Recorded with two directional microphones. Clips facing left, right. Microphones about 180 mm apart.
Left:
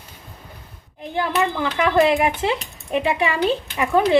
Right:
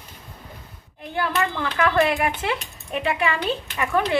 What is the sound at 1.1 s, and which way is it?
Speech, 15° left (ahead or behind).